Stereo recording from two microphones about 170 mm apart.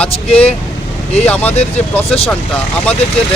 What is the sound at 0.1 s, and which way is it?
Speech, 35° left (ahead or behind).